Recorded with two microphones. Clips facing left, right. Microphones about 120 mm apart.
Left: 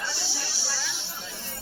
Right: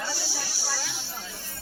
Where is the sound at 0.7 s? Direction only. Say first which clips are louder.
Right 3 dB; 45° right (ahead or behind).